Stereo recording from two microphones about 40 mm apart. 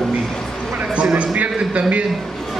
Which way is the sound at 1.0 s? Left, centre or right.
Right.